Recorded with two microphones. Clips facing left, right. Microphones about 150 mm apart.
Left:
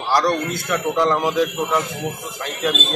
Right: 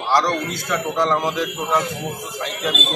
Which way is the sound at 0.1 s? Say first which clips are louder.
Left 1 dB; 5° left (ahead or behind).